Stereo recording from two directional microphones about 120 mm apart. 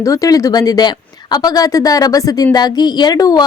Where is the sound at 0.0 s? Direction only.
30° left (ahead or behind).